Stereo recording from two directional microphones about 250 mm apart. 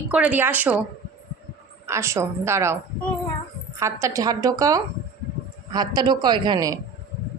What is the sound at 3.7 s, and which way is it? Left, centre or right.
A woman's voice, centre.